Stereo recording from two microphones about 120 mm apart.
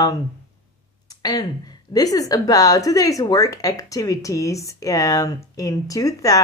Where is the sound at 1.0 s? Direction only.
30° left (ahead or behind).